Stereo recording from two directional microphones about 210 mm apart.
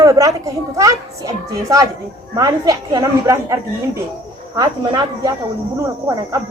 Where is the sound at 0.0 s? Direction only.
15° right (ahead or behind).